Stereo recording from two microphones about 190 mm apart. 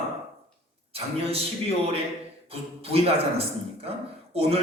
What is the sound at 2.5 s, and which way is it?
A man's voice, 30° right (ahead or behind).